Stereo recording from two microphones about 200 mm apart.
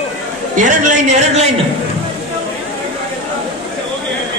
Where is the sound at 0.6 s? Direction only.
40° right (ahead or behind).